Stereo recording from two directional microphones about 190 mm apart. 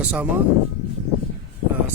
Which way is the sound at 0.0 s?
5° right (ahead or behind).